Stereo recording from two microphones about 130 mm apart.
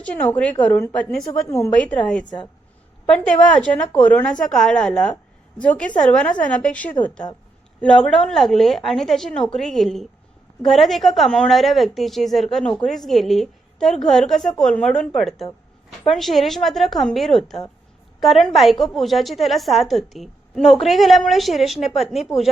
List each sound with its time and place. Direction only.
0.0 s a woman's voice: 10° left (ahead or behind)
1.3 s a woman's voice: 25° left (ahead or behind)
1.7 s a woman's voice: 10° left (ahead or behind)